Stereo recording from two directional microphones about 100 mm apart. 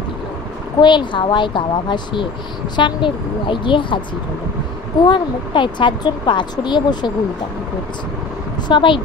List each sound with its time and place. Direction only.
0.7 s a woman's voice: 50° left (ahead or behind)
5.0 s a woman's voice: 50° left (ahead or behind)
8.6 s a woman's voice: 55° left (ahead or behind)